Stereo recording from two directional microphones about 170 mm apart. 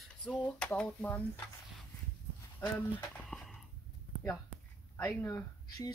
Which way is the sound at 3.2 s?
Centre (ahead or behind).